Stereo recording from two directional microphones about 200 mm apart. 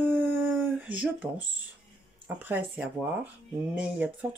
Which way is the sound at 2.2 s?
10° right (ahead or behind).